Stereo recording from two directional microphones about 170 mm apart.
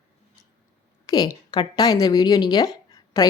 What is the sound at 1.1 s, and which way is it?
A woman's voice, 20° left (ahead or behind).